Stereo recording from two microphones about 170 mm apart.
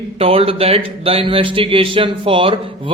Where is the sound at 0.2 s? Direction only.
35° right (ahead or behind).